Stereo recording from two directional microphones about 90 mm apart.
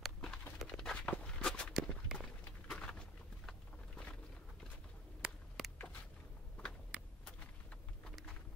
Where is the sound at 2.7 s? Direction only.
10° left (ahead or behind).